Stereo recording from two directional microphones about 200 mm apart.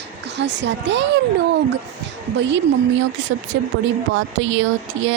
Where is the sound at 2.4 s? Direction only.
65° right (ahead or behind).